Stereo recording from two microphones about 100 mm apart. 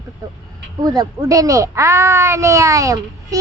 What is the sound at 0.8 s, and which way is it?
A child's voice, 40° right (ahead or behind).